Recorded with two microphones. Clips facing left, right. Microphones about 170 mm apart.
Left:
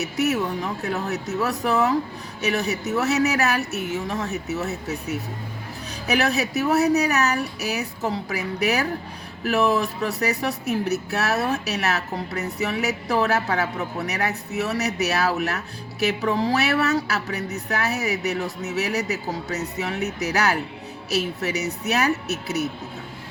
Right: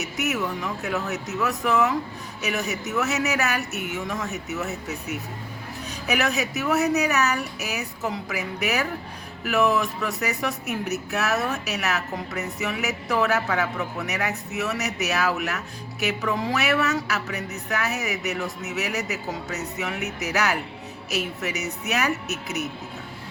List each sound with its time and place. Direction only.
0.0 s speech: 30° left (ahead or behind)